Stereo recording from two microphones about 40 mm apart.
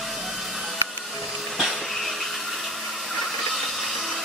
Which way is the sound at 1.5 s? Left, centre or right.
Centre.